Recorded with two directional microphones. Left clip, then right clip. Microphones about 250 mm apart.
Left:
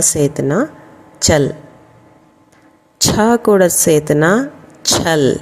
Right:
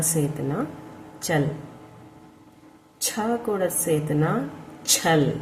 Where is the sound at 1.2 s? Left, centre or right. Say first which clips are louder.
Left 12 dB; left.